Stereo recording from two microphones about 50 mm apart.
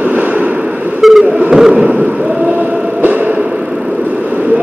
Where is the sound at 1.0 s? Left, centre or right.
Centre.